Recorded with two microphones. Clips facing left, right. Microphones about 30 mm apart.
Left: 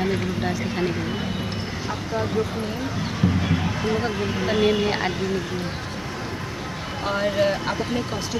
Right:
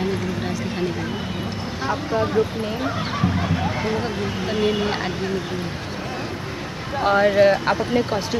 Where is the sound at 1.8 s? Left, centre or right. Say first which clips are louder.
Right 6 dB; right.